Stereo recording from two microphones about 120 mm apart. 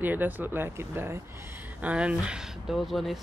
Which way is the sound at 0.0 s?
15° right (ahead or behind).